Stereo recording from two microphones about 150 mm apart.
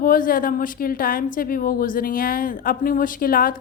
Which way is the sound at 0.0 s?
65° left (ahead or behind).